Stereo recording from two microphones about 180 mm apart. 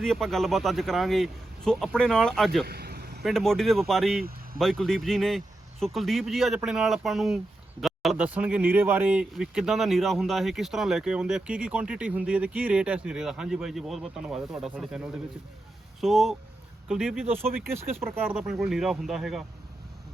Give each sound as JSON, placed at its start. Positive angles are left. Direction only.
{"t": 0.0, "sound": "speech", "side_deg": 0}
{"t": 2.6, "sound": "vehicle", "side_deg": -60}
{"t": 3.2, "sound": "speech", "side_deg": 0}